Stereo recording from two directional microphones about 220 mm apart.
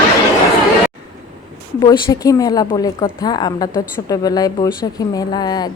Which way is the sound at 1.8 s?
15° left (ahead or behind).